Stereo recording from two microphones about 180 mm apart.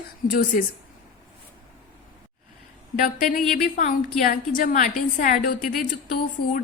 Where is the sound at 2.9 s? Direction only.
50° left (ahead or behind).